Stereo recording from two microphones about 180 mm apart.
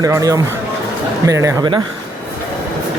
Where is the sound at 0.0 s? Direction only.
20° right (ahead or behind).